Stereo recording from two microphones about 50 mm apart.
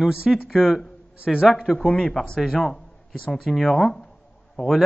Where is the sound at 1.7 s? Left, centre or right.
Centre.